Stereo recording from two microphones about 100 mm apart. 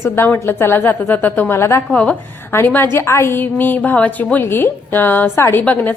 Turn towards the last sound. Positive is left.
turn(degrees=15)  # may be behind; listen again after turning